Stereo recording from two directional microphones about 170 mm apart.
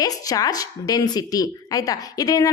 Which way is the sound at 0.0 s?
20° left (ahead or behind).